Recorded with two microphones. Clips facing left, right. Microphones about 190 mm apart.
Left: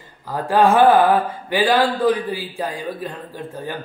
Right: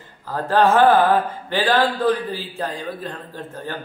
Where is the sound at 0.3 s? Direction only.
10° left (ahead or behind).